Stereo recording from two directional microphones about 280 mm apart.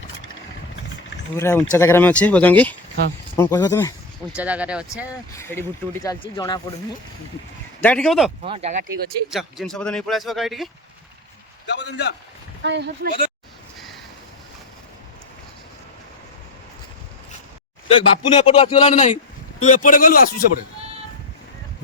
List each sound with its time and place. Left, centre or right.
1.4 s a man's voice: centre
4.4 s a man's voice: centre
5.3 s speech: centre
7.8 s a man's voice: centre
8.4 s speech: right
9.3 s a man's voice: centre
11.6 s a man's voice: left
12.6 s speech: right
17.8 s a man's voice: centre